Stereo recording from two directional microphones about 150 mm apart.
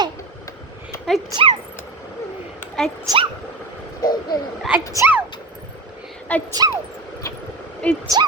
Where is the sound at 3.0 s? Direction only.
30° right (ahead or behind).